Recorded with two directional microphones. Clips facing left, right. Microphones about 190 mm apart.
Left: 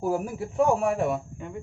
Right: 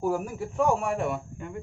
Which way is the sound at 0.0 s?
5° left (ahead or behind).